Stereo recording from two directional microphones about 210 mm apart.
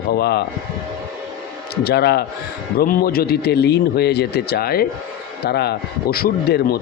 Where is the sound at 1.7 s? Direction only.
50° left (ahead or behind).